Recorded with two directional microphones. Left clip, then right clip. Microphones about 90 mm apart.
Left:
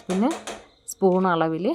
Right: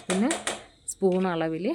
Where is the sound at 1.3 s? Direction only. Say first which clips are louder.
Left 6 dB; 25° left (ahead or behind).